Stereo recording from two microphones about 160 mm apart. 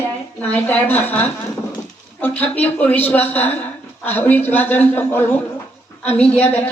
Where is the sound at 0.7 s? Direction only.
10° left (ahead or behind).